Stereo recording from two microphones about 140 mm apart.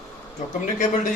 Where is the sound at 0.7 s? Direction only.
60° left (ahead or behind).